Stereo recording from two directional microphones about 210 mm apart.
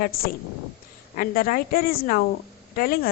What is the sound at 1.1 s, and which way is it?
Speech, 40° left (ahead or behind).